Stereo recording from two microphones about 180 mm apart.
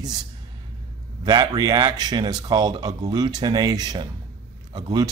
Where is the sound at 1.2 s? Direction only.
25° right (ahead or behind).